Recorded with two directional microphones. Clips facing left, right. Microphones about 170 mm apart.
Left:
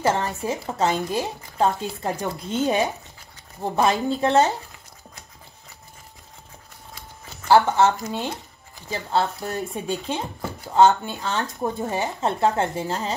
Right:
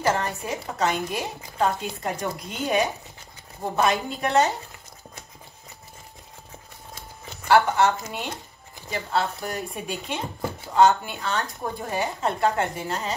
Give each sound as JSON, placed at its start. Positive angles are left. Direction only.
{"t": 0.0, "sound": "speech", "side_deg": 30}
{"t": 7.4, "sound": "speech", "side_deg": 30}